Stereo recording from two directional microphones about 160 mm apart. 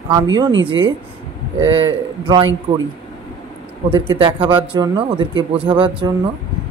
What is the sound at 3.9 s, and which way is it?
Speech, 30° right (ahead or behind).